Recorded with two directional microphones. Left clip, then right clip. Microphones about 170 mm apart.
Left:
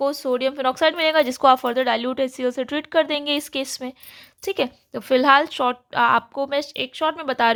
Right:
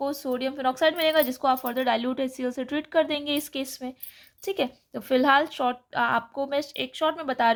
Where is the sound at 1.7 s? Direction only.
15° left (ahead or behind).